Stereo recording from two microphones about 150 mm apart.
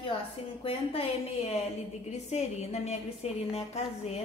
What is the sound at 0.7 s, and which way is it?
A woman's voice, 40° left (ahead or behind).